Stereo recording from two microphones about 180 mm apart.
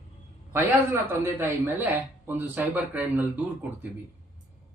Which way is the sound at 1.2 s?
10° right (ahead or behind).